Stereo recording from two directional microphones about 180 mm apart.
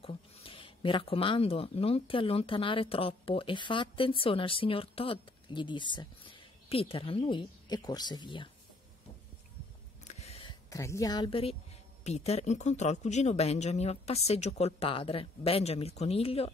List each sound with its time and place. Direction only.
0.0 s speech: 30° left (ahead or behind)
10.0 s a sound: 35° left (ahead or behind)
12.0 s speech: 35° left (ahead or behind)